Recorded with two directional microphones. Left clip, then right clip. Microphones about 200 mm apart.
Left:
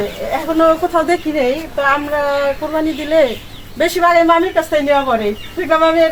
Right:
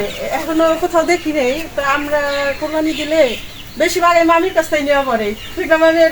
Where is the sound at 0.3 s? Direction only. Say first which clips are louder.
Left 2 dB; 15° right (ahead or behind).